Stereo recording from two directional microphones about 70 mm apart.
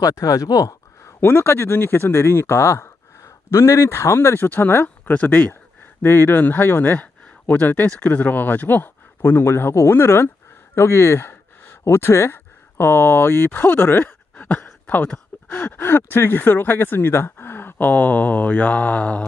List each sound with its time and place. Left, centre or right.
0.0 s speech: left
1.3 s speech: left
14.4 s a sound: left
15.5 s speech: left